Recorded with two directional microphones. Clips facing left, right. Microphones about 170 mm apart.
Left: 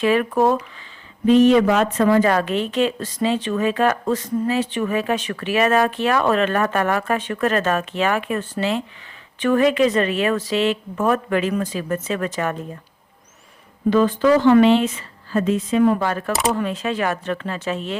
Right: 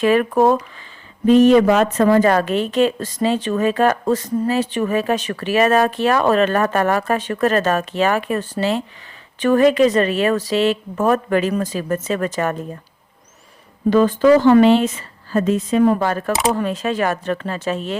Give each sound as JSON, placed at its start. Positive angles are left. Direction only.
{"t": 0.0, "sound": "a woman's voice", "side_deg": -45}
{"t": 13.9, "sound": "a woman's voice", "side_deg": -40}